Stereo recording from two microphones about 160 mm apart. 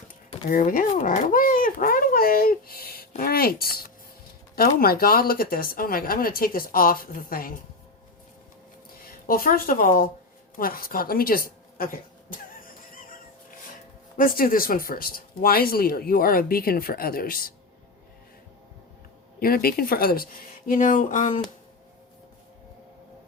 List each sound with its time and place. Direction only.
0.5 s speech: 65° left (ahead or behind)
9.0 s a woman's voice: 65° left (ahead or behind)
12.9 s music: 60° left (ahead or behind)
14.2 s speech: 60° left (ahead or behind)
19.4 s speech: 70° left (ahead or behind)
20.7 s speech: 55° left (ahead or behind)